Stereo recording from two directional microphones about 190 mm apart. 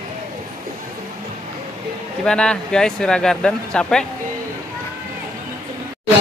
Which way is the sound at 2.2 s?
5° left (ahead or behind).